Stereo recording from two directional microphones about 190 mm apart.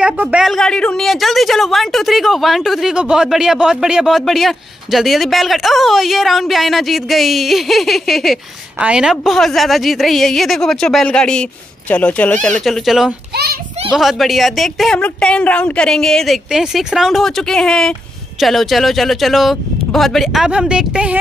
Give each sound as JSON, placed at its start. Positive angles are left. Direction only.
{"t": 0.0, "sound": "a woman's voice", "side_deg": -5}
{"t": 13.3, "sound": "a child's voice", "side_deg": -55}
{"t": 13.8, "sound": "a woman's voice", "side_deg": 0}